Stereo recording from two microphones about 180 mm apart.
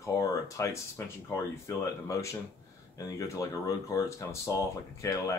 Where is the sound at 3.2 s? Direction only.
20° left (ahead or behind).